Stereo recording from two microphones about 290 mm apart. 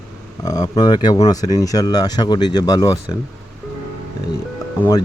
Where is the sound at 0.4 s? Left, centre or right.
Centre.